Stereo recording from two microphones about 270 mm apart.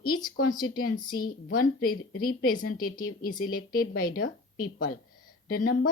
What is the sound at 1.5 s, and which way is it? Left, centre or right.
Speech, left.